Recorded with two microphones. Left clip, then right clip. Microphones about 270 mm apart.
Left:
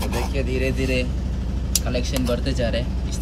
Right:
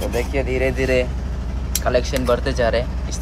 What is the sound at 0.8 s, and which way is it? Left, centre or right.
Speech, centre.